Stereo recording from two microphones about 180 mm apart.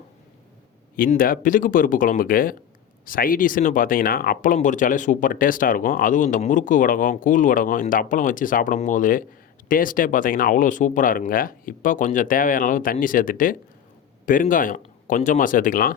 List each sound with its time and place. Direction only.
0.9 s speech: 50° left (ahead or behind)